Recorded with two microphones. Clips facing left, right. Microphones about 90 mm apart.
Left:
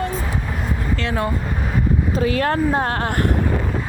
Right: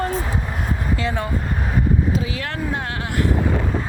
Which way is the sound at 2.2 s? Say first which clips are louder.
Left 8 dB; 50° left (ahead or behind).